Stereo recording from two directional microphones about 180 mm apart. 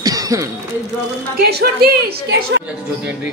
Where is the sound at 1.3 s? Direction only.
60° right (ahead or behind).